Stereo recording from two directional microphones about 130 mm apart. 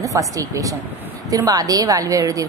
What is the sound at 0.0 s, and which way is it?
A woman's voice, 25° right (ahead or behind).